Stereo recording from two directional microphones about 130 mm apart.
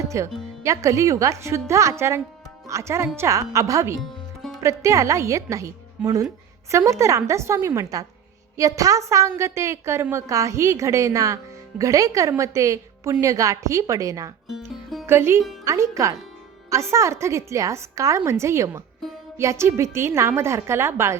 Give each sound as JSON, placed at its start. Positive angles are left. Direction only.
{"t": 0.1, "sound": "speech", "side_deg": -25}
{"t": 6.0, "sound": "speech", "side_deg": -10}
{"t": 6.7, "sound": "speech", "side_deg": -25}
{"t": 14.4, "sound": "music", "side_deg": 0}
{"t": 15.0, "sound": "music", "side_deg": -20}
{"t": 15.6, "sound": "speech", "side_deg": -25}